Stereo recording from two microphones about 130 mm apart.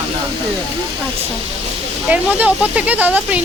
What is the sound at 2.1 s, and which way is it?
Speech, 10° right (ahead or behind).